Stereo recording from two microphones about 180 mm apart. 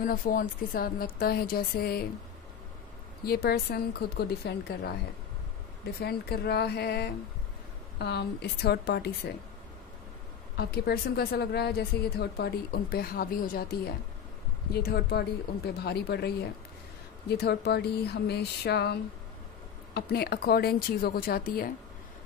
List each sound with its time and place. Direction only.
0.0 s a woman's voice: 50° left (ahead or behind)
3.3 s a woman's voice: 60° left (ahead or behind)
10.6 s a woman's voice: 60° left (ahead or behind)